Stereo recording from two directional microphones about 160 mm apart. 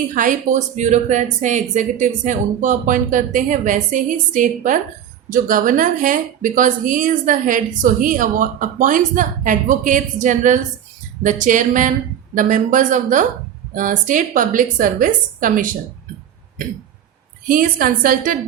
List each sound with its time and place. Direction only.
0.1 s a woman's voice: 55° right (ahead or behind)
17.5 s a woman's voice: 60° right (ahead or behind)